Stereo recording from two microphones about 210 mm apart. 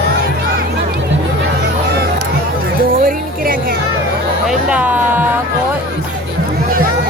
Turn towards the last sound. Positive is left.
turn(degrees=-10)  # may be behind; listen again after turning